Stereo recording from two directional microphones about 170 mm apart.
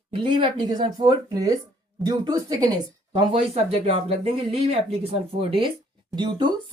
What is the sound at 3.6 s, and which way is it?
Speech, 35° right (ahead or behind).